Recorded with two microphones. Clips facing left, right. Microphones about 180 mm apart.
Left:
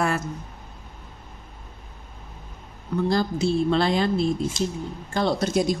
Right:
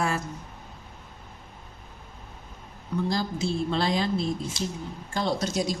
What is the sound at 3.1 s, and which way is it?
A woman's voice, 60° left (ahead or behind).